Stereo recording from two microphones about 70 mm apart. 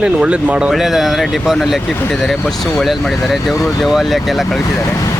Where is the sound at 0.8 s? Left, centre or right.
Centre.